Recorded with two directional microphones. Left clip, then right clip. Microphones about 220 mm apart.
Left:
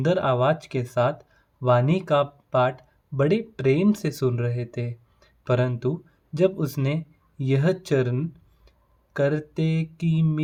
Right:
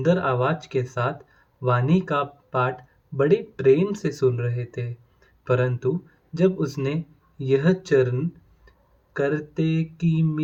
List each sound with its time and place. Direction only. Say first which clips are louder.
0.0 s speech: even; 45° left (ahead or behind)
9.1 s speech: even; 45° left (ahead or behind)